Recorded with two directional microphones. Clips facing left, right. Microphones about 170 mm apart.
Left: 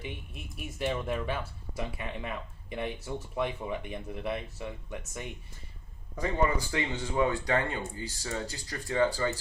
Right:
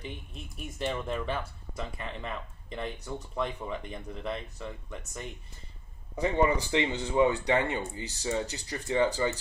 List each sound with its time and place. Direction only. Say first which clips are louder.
0.0 s speech: even; 5° left (ahead or behind)
6.7 s speech: right 4 dB; 20° right (ahead or behind)